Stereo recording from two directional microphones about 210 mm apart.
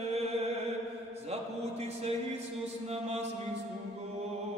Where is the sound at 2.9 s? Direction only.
30° right (ahead or behind).